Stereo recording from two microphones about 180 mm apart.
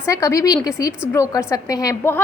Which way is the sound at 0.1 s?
15° left (ahead or behind).